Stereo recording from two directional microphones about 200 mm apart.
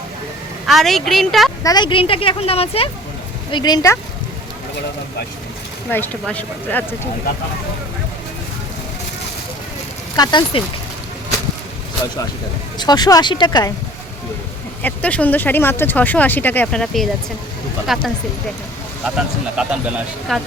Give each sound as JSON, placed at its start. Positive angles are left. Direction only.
{"t": 0.7, "sound": "a woman's voice", "side_deg": 0}
{"t": 1.6, "sound": "a woman's voice", "side_deg": 20}
{"t": 5.9, "sound": "speech", "side_deg": 10}
{"t": 10.2, "sound": "a woman's voice", "side_deg": 20}
{"t": 12.8, "sound": "a woman's voice", "side_deg": 20}
{"t": 14.8, "sound": "a woman's voice", "side_deg": 5}